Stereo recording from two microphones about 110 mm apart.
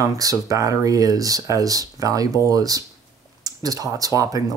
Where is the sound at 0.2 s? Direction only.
30° right (ahead or behind).